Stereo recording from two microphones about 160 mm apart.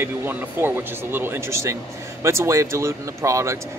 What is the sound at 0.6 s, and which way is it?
Speech, 15° right (ahead or behind).